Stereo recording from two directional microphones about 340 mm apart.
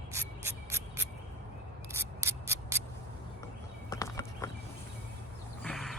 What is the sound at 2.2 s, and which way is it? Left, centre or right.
Rub, centre.